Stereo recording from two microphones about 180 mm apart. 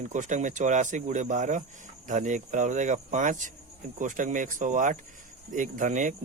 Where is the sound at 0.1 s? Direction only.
45° right (ahead or behind).